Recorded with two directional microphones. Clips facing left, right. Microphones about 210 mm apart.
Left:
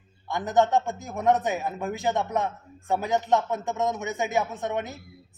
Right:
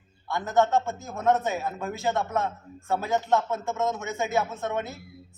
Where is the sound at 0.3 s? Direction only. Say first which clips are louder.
Left 1 dB; 15° left (ahead or behind).